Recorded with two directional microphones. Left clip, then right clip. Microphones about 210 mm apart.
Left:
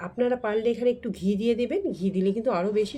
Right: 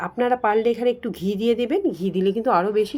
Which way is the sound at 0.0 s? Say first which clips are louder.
Right 5 dB; 15° right (ahead or behind).